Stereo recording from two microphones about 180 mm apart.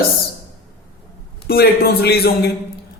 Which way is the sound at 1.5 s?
60° left (ahead or behind).